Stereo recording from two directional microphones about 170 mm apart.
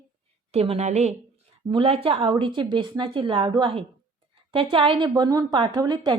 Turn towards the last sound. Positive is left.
turn(degrees=-25)  # may be behind; listen again after turning